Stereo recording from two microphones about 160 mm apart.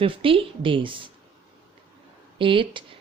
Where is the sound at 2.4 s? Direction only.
30° right (ahead or behind).